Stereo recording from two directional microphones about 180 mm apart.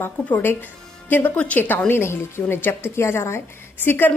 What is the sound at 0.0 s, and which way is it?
Speech, 10° left (ahead or behind).